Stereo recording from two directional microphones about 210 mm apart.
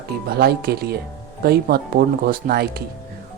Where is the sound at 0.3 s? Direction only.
50° right (ahead or behind).